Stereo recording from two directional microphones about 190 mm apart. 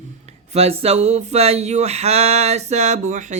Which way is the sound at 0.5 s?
30° right (ahead or behind).